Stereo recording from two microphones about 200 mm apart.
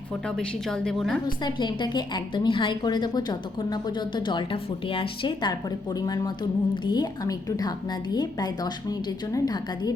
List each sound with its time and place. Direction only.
0.3 s a woman's voice: 5° left (ahead or behind)
1.5 s a woman's voice: 20° left (ahead or behind)